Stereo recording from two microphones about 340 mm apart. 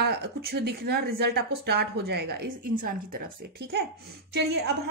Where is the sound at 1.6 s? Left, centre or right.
Right.